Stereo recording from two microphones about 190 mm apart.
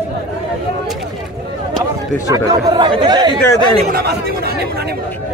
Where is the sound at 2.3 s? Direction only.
20° right (ahead or behind).